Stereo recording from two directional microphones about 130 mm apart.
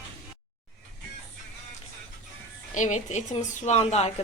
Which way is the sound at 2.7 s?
70° left (ahead or behind).